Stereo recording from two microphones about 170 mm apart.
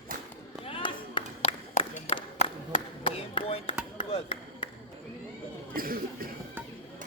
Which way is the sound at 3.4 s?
35° left (ahead or behind).